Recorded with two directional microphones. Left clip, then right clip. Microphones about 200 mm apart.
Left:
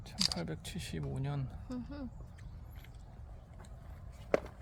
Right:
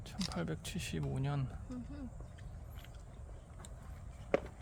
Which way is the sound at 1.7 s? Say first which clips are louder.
Left 5 dB; 55° left (ahead or behind).